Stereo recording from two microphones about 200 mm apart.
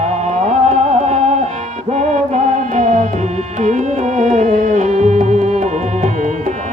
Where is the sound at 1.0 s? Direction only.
35° right (ahead or behind).